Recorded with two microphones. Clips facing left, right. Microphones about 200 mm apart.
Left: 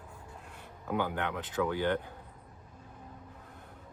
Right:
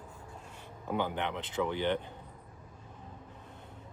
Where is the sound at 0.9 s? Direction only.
20° right (ahead or behind).